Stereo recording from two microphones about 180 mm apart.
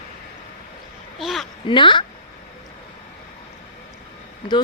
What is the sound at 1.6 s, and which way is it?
Speech, 25° left (ahead or behind).